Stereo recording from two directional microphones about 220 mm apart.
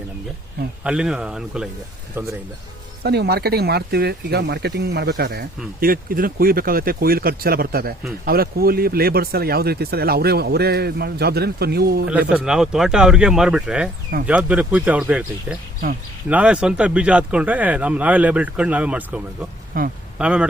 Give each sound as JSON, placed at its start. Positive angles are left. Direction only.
{"t": 0.9, "sound": "speech", "side_deg": -5}
{"t": 3.0, "sound": "speech", "side_deg": -45}
{"t": 12.3, "sound": "speech", "side_deg": -5}
{"t": 19.7, "sound": "speech", "side_deg": -40}
{"t": 20.1, "sound": "speech", "side_deg": -5}